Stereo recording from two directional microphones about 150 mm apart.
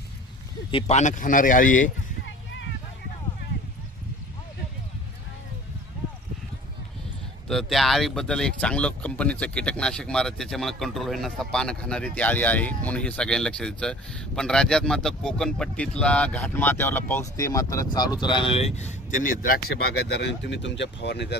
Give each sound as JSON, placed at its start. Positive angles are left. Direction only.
{"t": 0.7, "sound": "speech", "side_deg": 40}
{"t": 7.4, "sound": "speech", "side_deg": 0}
{"t": 21.3, "sound": "speech", "side_deg": 90}